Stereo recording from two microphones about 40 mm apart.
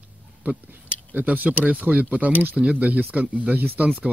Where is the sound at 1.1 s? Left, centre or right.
Right.